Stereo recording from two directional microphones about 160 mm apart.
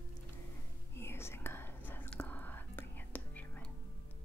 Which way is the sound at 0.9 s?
15° left (ahead or behind).